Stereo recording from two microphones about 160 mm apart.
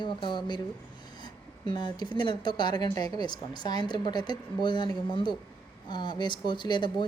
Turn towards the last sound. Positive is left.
turn(degrees=30)  # may be behind; listen again after turning